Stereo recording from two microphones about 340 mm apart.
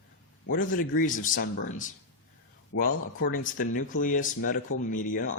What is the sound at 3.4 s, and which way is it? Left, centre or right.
Speech, left.